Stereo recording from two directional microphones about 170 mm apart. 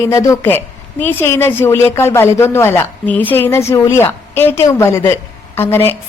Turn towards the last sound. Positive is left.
turn(degrees=15)  # may be behind; listen again after turning